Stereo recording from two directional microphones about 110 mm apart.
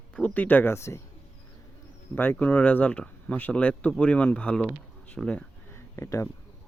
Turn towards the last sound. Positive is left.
turn(degrees=25)  # may be behind; listen again after turning